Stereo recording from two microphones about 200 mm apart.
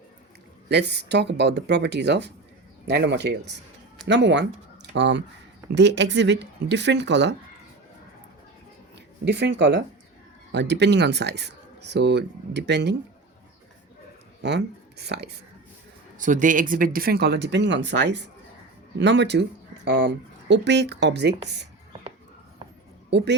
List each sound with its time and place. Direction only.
0.7 s speech: 55° right (ahead or behind)
9.2 s speech: 60° right (ahead or behind)
14.4 s speech: 55° right (ahead or behind)
16.1 s speech: 40° right (ahead or behind); by 21.3 s 60° right (ahead or behind)
23.0 s speech: 60° right (ahead or behind)